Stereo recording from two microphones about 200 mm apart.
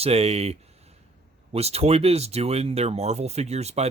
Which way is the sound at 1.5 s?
30° right (ahead or behind).